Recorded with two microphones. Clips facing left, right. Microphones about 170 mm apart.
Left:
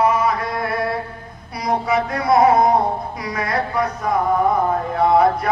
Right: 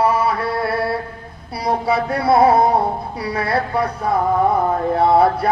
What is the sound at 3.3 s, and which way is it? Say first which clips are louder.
Speech: right 2 dB; 30° right (ahead or behind).